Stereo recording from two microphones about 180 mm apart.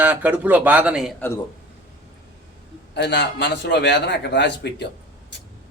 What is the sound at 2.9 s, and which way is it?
A man's voice, 70° left (ahead or behind).